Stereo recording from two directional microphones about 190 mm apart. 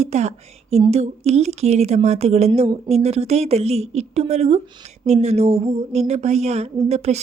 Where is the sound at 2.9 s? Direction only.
35° right (ahead or behind).